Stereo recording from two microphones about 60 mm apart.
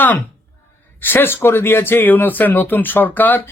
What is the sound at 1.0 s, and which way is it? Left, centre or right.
Speech, left.